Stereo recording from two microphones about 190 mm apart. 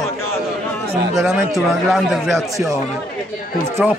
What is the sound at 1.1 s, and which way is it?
A man's voice, centre (ahead or behind).